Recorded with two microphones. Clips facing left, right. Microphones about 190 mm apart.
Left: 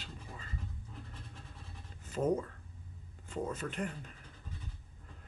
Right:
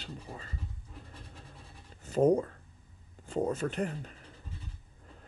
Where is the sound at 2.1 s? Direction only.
35° right (ahead or behind).